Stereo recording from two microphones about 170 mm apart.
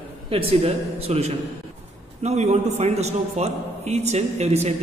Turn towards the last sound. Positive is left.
turn(degrees=-40)  # may be behind; listen again after turning